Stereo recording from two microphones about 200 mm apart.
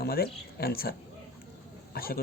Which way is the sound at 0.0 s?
50° left (ahead or behind).